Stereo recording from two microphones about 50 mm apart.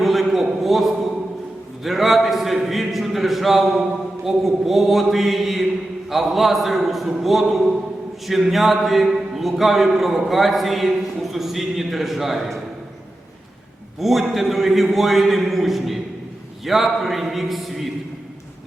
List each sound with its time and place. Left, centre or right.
0.0 s a sound: centre
1.8 s a man's voice: centre
14.0 s a man's voice: centre